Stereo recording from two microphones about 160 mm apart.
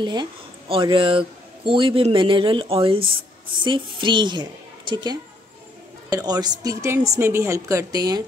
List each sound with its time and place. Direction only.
0.0 s a woman's voice: 25° right (ahead or behind)